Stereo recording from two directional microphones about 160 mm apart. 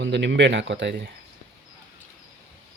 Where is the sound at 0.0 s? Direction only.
90° right.